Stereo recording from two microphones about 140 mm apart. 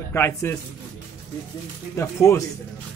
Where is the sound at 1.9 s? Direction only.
20° left (ahead or behind).